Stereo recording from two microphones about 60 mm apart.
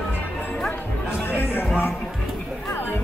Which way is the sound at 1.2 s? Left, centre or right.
Left.